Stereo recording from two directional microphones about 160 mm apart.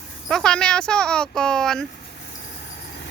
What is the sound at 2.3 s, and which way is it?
Vehicle, 65° left (ahead or behind).